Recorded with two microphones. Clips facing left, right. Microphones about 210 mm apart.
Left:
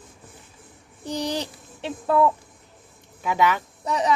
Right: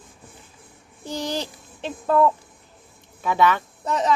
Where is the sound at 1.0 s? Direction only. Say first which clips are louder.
Left 1 dB; 15° left (ahead or behind).